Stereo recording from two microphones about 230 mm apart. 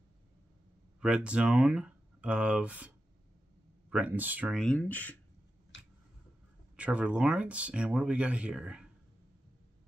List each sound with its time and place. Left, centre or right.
1.0 s speech: centre
3.9 s speech: centre
5.7 s a sound: left
6.8 s speech: centre